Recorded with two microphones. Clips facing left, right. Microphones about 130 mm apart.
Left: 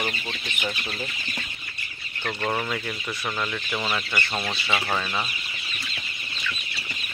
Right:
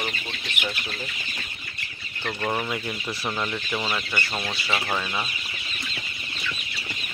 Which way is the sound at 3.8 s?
Centre (ahead or behind).